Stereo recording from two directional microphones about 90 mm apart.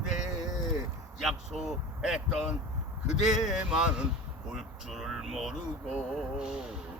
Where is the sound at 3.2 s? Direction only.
5° right (ahead or behind).